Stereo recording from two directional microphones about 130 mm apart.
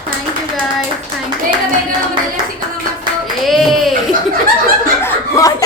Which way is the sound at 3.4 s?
Centre (ahead or behind).